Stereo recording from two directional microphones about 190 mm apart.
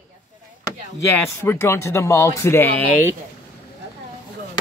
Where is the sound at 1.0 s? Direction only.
15° left (ahead or behind).